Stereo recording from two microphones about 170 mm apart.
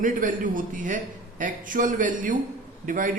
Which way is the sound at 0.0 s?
50° right (ahead or behind).